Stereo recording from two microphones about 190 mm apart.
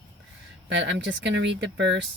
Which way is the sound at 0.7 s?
70° right (ahead or behind).